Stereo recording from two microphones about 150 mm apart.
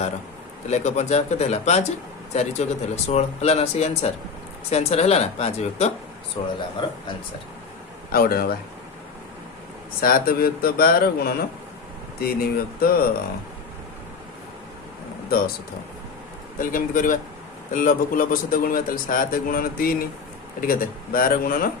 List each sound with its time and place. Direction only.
0.7 s speech: 50° left (ahead or behind)
6.4 s speech: 35° left (ahead or behind)
8.1 s speech: 85° left
10.0 s speech: 75° left (ahead or behind)
16.6 s a man's voice: 65° left (ahead or behind)